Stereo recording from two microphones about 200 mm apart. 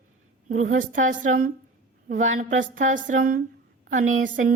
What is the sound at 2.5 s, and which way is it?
Speech, 70° right (ahead or behind).